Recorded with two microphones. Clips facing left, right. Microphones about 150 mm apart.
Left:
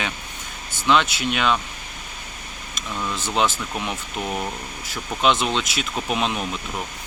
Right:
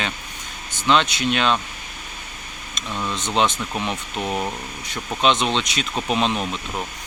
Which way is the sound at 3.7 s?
15° right (ahead or behind).